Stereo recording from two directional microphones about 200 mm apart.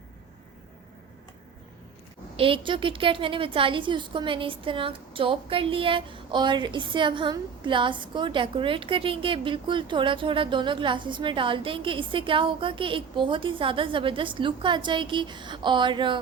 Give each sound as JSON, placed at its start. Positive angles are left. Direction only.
{"t": 2.3, "sound": "a woman's voice", "side_deg": -25}